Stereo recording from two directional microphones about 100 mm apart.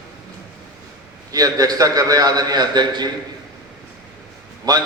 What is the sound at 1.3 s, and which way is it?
A man's voice, 35° right (ahead or behind).